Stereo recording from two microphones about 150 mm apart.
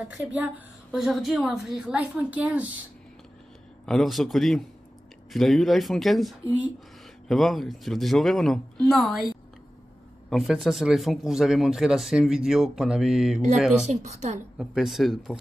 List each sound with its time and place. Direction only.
0.1 s speech: 10° right (ahead or behind)
3.8 s speech: centre (ahead or behind)
10.3 s speech: centre (ahead or behind)
13.8 s a woman's voice: 50° right (ahead or behind)
14.6 s speech: 5° right (ahead or behind)